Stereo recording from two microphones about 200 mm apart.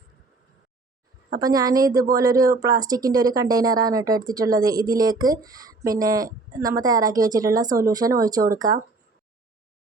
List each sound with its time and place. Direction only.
1.4 s speech: 20° right (ahead or behind)